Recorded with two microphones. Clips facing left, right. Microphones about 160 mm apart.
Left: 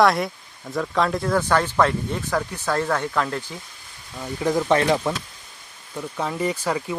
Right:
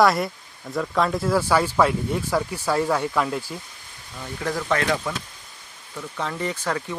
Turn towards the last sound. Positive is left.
turn(degrees=10)  # may be behind; listen again after turning